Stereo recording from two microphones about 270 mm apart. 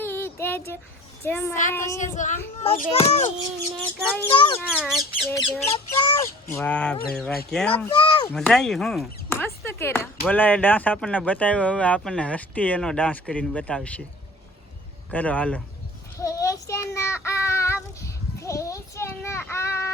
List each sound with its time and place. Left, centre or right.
0.0 s child singing: centre
1.2 s speech: centre
2.1 s a child's voice: left
4.7 s speech: centre
5.3 s speech: centre
7.9 s a child's voice: centre
8.3 s speech: centre
15.1 s speech: centre
16.1 s child singing: centre